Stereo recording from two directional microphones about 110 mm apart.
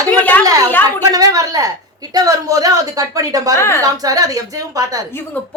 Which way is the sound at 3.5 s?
25° left (ahead or behind).